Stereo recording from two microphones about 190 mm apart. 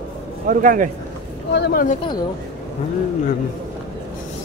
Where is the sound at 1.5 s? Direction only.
60° left (ahead or behind).